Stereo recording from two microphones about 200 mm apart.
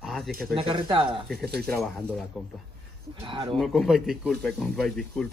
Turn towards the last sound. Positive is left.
turn(degrees=5)  # may be behind; listen again after turning